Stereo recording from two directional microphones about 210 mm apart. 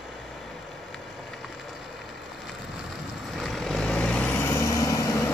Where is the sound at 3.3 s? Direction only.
Centre (ahead or behind).